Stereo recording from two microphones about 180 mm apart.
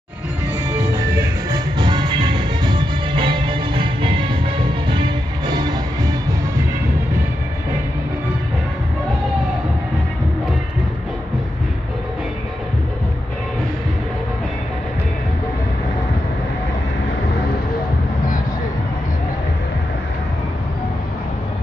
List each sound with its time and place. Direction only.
1.5 s music: 25° right (ahead or behind)